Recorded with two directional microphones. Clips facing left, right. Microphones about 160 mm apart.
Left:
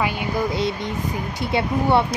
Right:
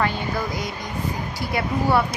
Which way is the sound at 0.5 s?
25° left (ahead or behind).